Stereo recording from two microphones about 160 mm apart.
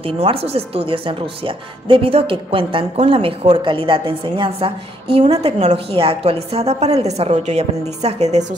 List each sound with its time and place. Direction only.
0.0 s speech: 35° right (ahead or behind)